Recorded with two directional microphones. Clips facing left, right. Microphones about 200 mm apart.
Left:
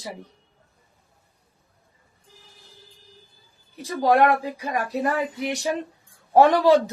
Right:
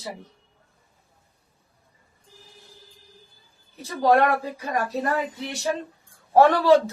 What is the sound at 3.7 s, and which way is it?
Speech, 15° left (ahead or behind).